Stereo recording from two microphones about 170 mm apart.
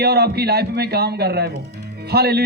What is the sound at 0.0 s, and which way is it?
A man's voice, 70° right (ahead or behind).